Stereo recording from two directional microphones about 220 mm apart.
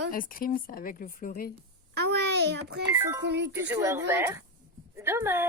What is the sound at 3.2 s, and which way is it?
Speech, 50° right (ahead or behind).